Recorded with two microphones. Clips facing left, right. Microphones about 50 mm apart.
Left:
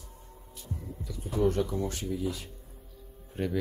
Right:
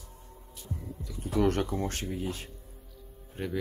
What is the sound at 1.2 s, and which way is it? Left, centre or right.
Speech, right.